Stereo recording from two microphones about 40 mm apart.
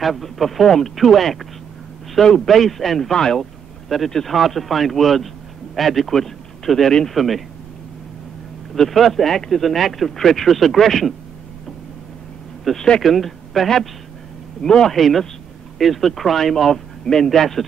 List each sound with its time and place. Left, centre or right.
0.0 s speech: centre
8.7 s speech: centre
12.7 s speech: centre
13.0 s speech: centre